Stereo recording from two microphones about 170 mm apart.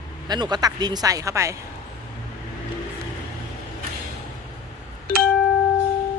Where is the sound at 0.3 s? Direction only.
25° right (ahead or behind).